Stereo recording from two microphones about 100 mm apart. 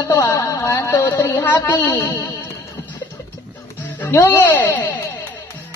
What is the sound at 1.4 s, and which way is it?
Speech, 25° left (ahead or behind).